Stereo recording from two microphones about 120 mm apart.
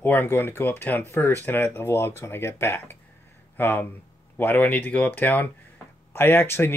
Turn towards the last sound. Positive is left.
turn(degrees=20)  # may be behind; listen again after turning